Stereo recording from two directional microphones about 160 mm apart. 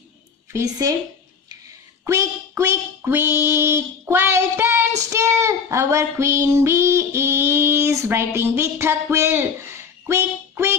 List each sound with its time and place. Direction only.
2.0 s child singing: 20° right (ahead or behind)